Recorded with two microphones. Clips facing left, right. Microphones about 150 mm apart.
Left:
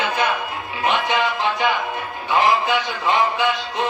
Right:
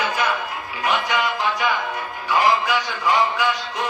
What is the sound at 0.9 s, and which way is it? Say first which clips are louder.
Music: left 2 dB; 25° left (ahead or behind).